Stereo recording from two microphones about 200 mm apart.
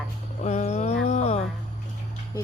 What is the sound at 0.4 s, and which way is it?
Music, 35° left (ahead or behind).